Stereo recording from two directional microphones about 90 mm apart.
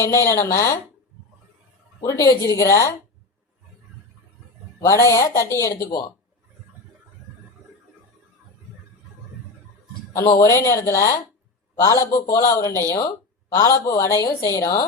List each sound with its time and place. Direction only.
0.0 s speech: 35° left (ahead or behind)
2.0 s speech: 40° left (ahead or behind)
4.9 s speech: 35° left (ahead or behind)
10.5 s speech: 35° left (ahead or behind)